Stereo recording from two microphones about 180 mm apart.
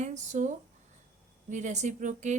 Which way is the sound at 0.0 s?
40° right (ahead or behind).